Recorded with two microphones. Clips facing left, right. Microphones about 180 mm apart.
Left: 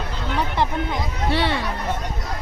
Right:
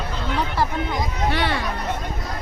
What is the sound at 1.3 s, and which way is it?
Speech, 30° left (ahead or behind).